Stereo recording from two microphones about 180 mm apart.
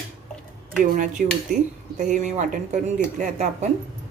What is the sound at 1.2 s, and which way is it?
Speech, 50° right (ahead or behind).